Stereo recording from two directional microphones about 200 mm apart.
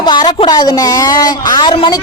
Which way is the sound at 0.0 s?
20° left (ahead or behind).